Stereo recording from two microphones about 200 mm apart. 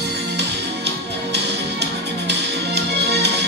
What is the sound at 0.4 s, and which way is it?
Music, 55° right (ahead or behind).